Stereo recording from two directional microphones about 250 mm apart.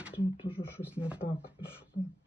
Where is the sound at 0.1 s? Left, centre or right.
Left.